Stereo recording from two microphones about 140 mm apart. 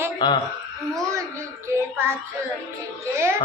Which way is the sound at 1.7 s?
20° right (ahead or behind).